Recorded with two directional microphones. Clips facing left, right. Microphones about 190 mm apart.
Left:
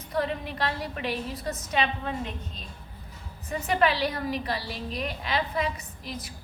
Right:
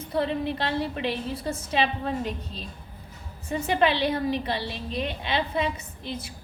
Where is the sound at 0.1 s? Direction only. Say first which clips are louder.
Right 3 dB; 30° right (ahead or behind).